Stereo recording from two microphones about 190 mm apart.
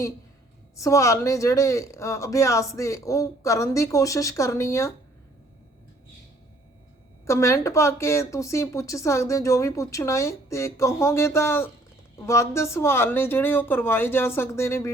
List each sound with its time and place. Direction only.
0.8 s speech: 15° left (ahead or behind)
7.3 s speech: 15° left (ahead or behind)